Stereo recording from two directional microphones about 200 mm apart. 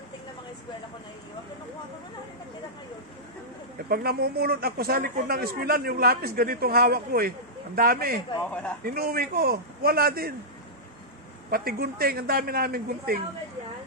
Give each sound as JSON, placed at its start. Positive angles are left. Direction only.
{"t": 3.9, "sound": "a man's voice", "side_deg": -50}
{"t": 11.5, "sound": "a man's voice", "side_deg": -50}